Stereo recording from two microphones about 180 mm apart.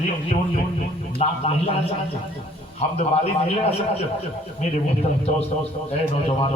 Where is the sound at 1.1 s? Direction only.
35° left (ahead or behind).